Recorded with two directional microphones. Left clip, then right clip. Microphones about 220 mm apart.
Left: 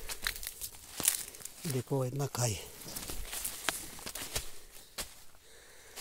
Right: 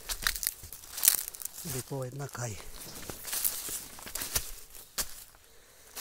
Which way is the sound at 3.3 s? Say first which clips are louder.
Right 8 dB; 50° right (ahead or behind).